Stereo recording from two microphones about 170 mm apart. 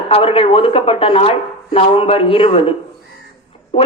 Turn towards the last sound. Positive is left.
turn(degrees=35)  # may be behind; listen again after turning